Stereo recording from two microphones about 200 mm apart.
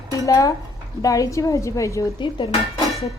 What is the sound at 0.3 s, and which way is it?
Speech, 15° left (ahead or behind).